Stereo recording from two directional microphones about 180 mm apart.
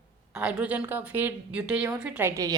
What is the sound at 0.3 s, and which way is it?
A woman's voice, 5° right (ahead or behind).